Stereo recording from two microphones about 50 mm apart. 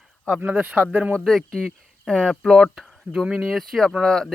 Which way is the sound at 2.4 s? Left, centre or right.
Centre.